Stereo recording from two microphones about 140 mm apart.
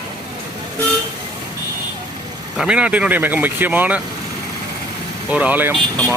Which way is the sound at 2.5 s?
5° right (ahead or behind).